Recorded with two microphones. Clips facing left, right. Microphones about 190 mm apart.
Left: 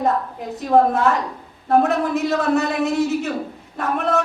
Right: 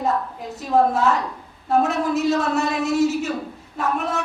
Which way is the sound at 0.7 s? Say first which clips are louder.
Left 2 dB; 55° left (ahead or behind).